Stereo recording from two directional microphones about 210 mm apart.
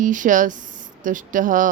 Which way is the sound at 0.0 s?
40° right (ahead or behind).